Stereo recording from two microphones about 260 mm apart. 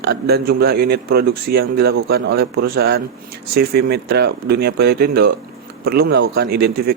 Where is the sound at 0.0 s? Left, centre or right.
Right.